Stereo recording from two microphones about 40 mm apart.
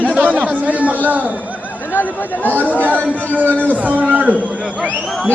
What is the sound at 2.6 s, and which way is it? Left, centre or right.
Speech, left.